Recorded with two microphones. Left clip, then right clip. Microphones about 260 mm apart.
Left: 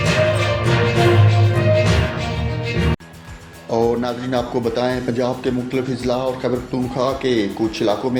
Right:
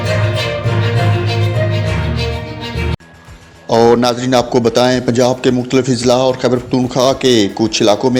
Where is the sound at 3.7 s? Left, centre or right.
Right.